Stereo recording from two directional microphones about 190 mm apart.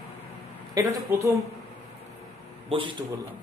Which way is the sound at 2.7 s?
25° right (ahead or behind).